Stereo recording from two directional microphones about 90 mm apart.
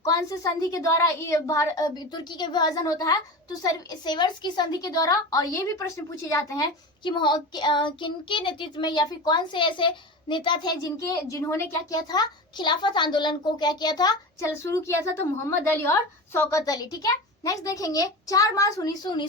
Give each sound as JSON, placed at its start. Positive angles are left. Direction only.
{"t": 0.0, "sound": "a woman's voice", "side_deg": 40}
{"t": 7.0, "sound": "speech", "side_deg": 55}
{"t": 10.9, "sound": "a woman's voice", "side_deg": 35}
{"t": 11.9, "sound": "a woman's voice", "side_deg": 45}
{"t": 14.3, "sound": "a woman's voice", "side_deg": 35}